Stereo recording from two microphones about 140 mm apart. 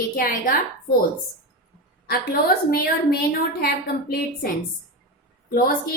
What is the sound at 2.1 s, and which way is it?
Speech, 90° left.